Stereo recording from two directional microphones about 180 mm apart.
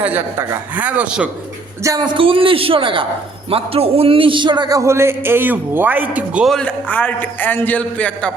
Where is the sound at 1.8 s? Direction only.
20° right (ahead or behind).